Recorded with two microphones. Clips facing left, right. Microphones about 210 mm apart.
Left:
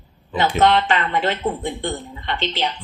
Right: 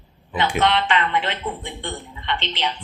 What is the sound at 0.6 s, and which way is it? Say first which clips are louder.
A woman's voice: left 4 dB; 40° left (ahead or behind).